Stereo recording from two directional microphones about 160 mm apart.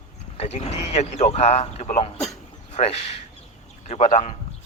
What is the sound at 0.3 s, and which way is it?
Speech, 40° left (ahead or behind).